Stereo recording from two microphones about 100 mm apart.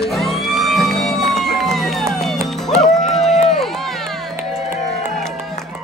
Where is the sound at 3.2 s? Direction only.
90° left.